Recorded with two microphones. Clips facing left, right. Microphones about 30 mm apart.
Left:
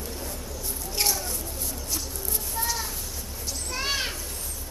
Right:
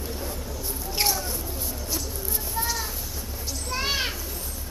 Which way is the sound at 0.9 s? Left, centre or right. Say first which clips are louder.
Right 2 dB; centre.